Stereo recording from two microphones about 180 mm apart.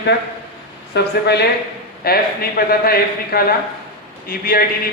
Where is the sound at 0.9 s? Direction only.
65° left (ahead or behind).